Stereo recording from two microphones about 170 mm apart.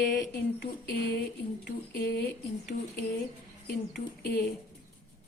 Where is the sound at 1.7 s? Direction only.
75° left (ahead or behind).